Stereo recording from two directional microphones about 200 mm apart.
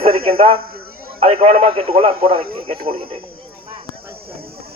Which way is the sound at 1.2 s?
35° right (ahead or behind).